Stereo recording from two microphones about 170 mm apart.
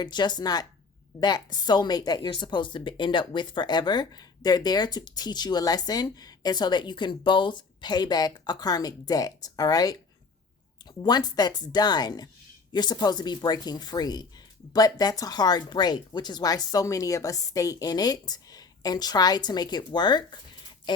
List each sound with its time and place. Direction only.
0.0 s a woman's voice: 25° left (ahead or behind)